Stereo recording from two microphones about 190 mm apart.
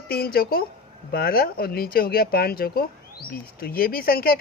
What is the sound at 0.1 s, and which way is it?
Speech, 55° left (ahead or behind).